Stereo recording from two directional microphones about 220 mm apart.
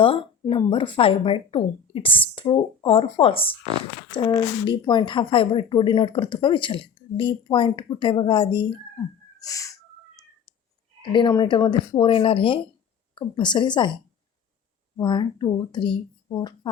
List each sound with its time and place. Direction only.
0.0 s speech: 25° left (ahead or behind)
9.4 s a sound: 15° left (ahead or behind)
11.1 s speech: 20° left (ahead or behind)
14.9 s speech: 20° left (ahead or behind)